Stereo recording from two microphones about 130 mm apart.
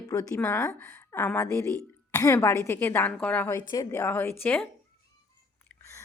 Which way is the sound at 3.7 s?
25° left (ahead or behind).